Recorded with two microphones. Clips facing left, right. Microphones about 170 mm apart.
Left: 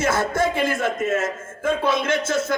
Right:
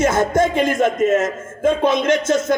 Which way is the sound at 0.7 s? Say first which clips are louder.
Right 6 dB; 25° right (ahead or behind).